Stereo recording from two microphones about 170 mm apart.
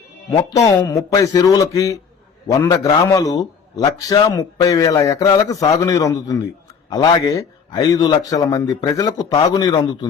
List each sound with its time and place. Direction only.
0.3 s a man's voice: 20° left (ahead or behind)